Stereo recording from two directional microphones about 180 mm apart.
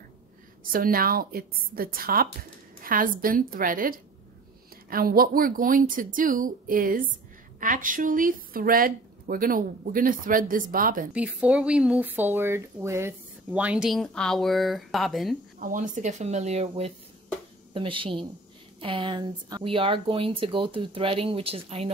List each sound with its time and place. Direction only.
0.7 s speech: 50° right (ahead or behind)
11.1 s speech: 5° right (ahead or behind)
15.6 s speech: 45° right (ahead or behind)